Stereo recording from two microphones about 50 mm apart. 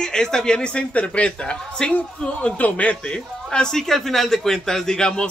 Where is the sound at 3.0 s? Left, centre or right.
Centre.